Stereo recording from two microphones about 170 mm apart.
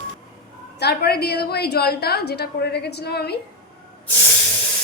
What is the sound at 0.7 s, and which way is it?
A woman's voice, 70° left (ahead or behind).